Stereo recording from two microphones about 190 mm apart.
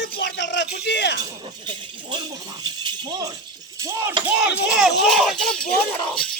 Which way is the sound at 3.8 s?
15° right (ahead or behind).